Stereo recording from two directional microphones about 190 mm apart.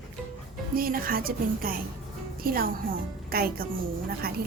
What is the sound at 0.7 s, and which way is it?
Speech, 50° right (ahead or behind).